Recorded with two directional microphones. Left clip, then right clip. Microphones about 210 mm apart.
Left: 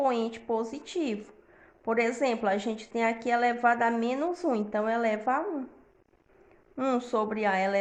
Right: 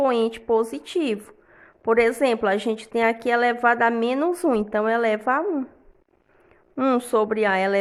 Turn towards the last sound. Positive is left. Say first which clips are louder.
# right 6 dB
turn(degrees=-40)  # may be behind; listen again after turning